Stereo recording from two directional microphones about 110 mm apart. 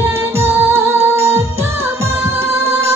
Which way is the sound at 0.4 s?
20° right (ahead or behind).